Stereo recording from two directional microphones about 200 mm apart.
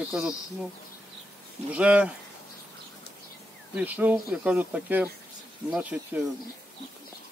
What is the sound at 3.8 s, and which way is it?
Speech, 10° right (ahead or behind).